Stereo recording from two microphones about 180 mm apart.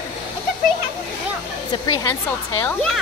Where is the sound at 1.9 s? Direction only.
20° left (ahead or behind).